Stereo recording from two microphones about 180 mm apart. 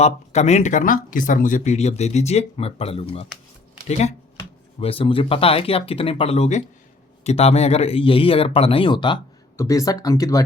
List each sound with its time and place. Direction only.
0.0 s speech: 40° left (ahead or behind); by 10.4 s 20° left (ahead or behind)